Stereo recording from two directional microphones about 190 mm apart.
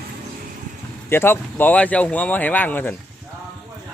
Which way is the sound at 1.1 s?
10° left (ahead or behind).